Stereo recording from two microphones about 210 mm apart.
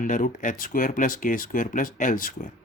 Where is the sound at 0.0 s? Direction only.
40° left (ahead or behind).